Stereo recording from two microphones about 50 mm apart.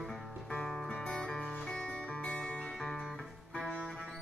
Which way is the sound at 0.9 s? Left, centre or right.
Centre.